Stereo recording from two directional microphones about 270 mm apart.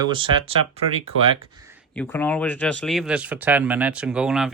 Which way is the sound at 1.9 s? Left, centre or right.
Centre.